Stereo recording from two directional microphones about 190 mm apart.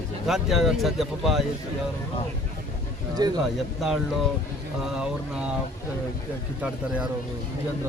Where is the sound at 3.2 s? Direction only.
20° right (ahead or behind).